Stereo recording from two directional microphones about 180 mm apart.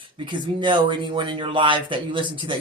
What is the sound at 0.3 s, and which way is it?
Speech, 25° right (ahead or behind).